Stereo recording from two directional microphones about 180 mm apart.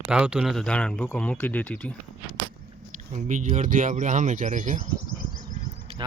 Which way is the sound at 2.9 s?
45° right (ahead or behind).